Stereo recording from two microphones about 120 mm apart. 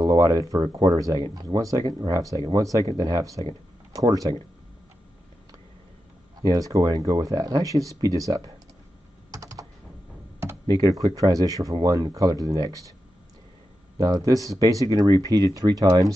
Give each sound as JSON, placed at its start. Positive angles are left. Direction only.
{"t": 0.0, "sound": "speech", "side_deg": -30}
{"t": 6.4, "sound": "speech", "side_deg": -30}
{"t": 9.3, "sound": "typing", "side_deg": -25}
{"t": 10.4, "sound": "speech", "side_deg": -30}
{"t": 13.9, "sound": "speech", "side_deg": -30}